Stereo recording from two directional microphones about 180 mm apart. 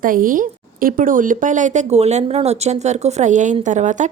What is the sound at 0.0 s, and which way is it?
Speech, 50° right (ahead or behind).